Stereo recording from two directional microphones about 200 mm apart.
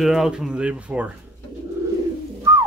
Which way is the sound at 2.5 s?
20° right (ahead or behind).